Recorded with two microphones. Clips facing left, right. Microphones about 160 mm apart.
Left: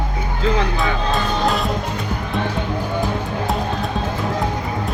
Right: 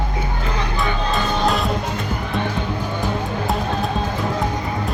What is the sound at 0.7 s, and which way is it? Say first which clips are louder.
Music: left 1 dB; centre (ahead or behind).